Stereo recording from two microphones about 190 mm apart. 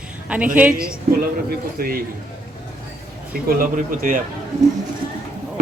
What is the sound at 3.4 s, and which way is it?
Speech, 50° right (ahead or behind).